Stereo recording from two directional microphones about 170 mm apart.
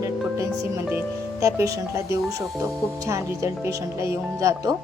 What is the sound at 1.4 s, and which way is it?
Music, 20° right (ahead or behind).